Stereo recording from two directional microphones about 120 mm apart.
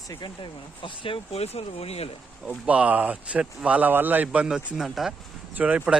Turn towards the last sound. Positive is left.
turn(degrees=-10)  # may be behind; listen again after turning